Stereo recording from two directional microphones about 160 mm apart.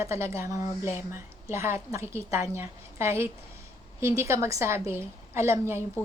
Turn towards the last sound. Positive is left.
turn(degrees=-15)  # may be behind; listen again after turning